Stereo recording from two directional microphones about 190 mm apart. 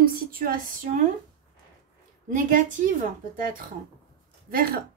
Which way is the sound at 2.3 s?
45° right (ahead or behind).